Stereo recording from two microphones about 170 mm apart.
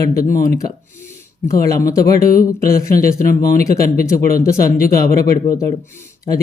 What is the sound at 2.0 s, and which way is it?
Speech, 60° left (ahead or behind).